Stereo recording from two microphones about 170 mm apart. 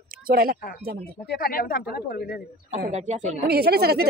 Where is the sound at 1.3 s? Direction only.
60° left (ahead or behind).